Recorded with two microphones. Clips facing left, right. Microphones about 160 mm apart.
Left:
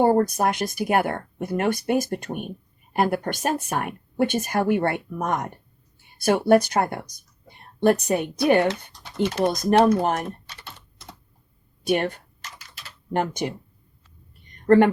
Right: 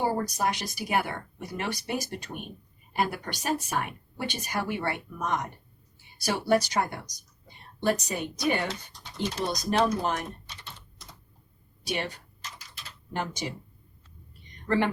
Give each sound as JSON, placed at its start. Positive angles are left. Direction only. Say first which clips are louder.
{"t": 0.0, "sound": "speech", "louder": "left 9 dB", "side_deg": 55}
{"t": 11.9, "sound": "speech", "louder": "left 10 dB", "side_deg": 55}